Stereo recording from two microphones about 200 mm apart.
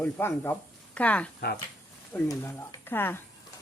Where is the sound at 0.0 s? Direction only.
10° left (ahead or behind).